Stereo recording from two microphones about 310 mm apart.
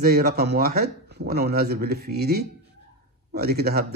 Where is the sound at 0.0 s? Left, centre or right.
Right.